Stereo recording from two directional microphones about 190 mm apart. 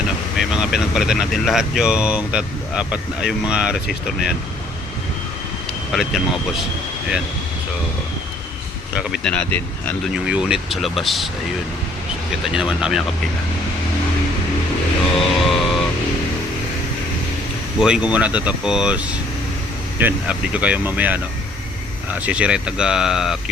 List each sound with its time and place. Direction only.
0.3 s speech: 5° right (ahead or behind)
5.9 s speech: centre (ahead or behind)
9.0 s speech: centre (ahead or behind)
10.2 s speech: 5° right (ahead or behind)
12.3 s speech: 5° right (ahead or behind)
15.1 s music: centre (ahead or behind)
17.7 s speech: 5° right (ahead or behind)